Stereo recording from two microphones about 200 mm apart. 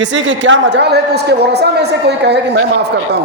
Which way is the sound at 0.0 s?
65° right (ahead or behind).